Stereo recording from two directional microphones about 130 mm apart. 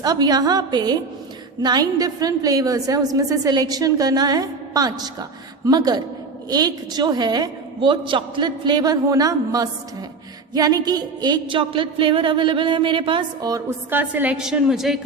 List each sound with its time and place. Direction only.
0.0 s a woman's voice: 30° right (ahead or behind)
13.5 s a woman's voice: 15° right (ahead or behind)